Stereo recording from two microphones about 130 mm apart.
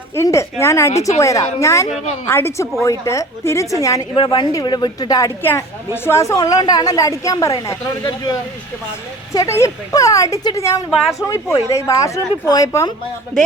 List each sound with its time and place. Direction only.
0.2 s a woman's voice: 20° left (ahead or behind)
5.4 s a woman's voice: 15° left (ahead or behind)